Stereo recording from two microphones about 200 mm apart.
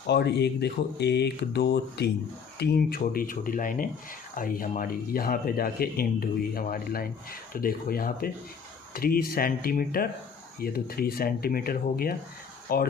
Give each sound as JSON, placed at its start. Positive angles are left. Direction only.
{"t": 0.1, "sound": "speech", "side_deg": 55}